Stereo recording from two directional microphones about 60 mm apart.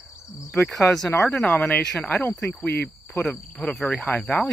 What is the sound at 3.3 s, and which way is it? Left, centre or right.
Speech, centre.